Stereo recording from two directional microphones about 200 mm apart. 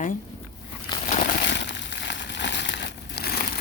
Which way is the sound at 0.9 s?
25° left (ahead or behind).